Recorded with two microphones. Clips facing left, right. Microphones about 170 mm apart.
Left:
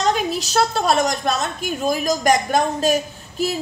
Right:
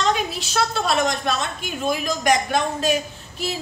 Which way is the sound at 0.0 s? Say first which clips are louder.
Left 2 dB; 40° left (ahead or behind).